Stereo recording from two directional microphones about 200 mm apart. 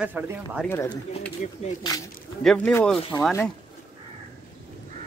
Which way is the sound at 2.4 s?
5° left (ahead or behind).